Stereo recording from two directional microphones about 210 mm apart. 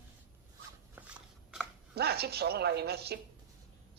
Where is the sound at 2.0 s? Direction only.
50° right (ahead or behind).